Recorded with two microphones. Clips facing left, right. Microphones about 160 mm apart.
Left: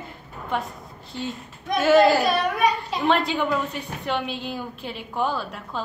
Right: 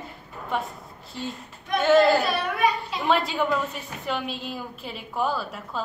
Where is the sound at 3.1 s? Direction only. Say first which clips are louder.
Left 1 dB; 5° right (ahead or behind).